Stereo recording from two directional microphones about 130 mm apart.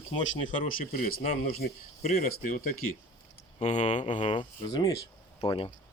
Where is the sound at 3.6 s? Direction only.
60° left (ahead or behind).